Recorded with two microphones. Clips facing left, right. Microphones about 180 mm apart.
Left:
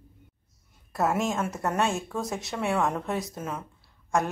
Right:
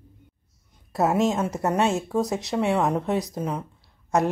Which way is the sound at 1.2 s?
20° right (ahead or behind).